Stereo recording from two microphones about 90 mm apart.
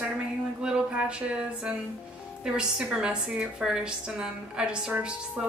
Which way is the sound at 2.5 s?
10° right (ahead or behind).